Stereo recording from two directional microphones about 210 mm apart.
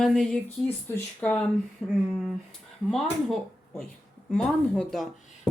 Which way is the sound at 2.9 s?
Centre (ahead or behind).